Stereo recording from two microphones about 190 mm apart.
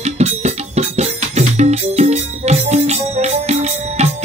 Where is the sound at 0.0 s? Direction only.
35° right (ahead or behind).